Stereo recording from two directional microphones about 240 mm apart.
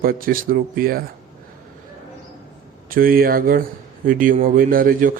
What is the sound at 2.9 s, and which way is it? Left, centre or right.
A man's voice, right.